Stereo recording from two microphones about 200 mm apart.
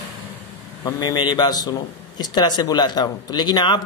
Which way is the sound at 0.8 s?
20° left (ahead or behind).